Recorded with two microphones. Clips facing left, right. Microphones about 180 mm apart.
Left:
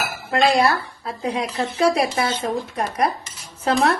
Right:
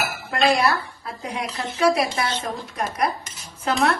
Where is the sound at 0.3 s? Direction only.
25° left (ahead or behind).